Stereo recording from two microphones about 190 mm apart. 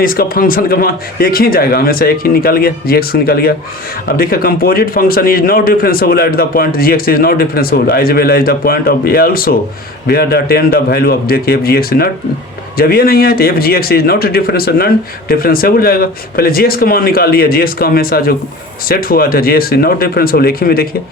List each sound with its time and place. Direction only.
0.0 s a man's voice: 50° left (ahead or behind)